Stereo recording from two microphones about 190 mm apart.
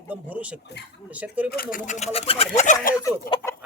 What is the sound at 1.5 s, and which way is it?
Speech, 50° left (ahead or behind).